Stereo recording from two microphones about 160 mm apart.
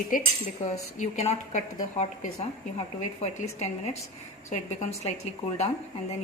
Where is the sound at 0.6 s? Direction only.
45° left (ahead or behind).